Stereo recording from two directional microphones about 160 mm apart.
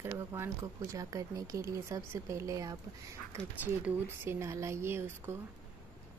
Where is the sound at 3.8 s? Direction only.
15° right (ahead or behind).